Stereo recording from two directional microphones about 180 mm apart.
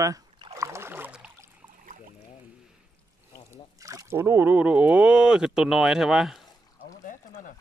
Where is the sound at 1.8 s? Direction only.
50° right (ahead or behind).